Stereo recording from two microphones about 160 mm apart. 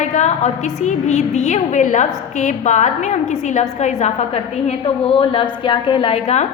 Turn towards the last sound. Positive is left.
turn(degrees=45)  # may be behind; listen again after turning